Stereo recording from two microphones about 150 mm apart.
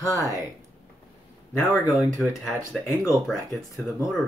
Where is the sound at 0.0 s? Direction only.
20° left (ahead or behind).